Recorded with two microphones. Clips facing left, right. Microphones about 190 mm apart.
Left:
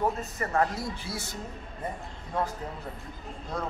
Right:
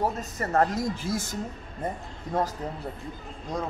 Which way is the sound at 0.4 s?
45° right (ahead or behind).